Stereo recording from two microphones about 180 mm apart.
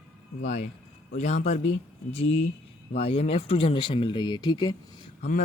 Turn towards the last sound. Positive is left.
turn(degrees=45)  # may be behind; listen again after turning